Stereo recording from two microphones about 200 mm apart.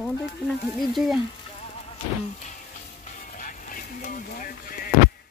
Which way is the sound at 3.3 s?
40° left (ahead or behind).